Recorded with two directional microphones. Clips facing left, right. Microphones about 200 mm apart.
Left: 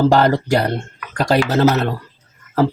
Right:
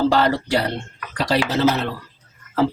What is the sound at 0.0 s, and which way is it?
Speech, 50° left (ahead or behind).